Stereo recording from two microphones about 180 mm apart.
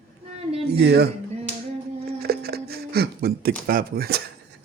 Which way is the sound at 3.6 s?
55° right (ahead or behind).